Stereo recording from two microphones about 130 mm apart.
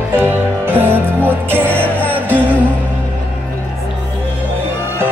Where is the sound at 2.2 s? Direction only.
15° right (ahead or behind).